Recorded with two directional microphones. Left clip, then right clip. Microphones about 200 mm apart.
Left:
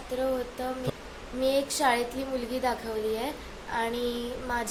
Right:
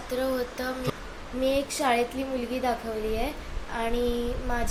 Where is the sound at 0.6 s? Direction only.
20° left (ahead or behind).